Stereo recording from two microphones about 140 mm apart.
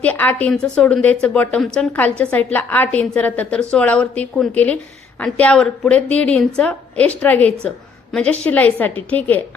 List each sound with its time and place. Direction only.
0.0 s a woman's voice: 10° left (ahead or behind)